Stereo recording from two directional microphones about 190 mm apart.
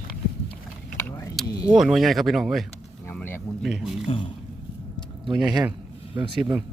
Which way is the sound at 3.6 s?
Centre (ahead or behind).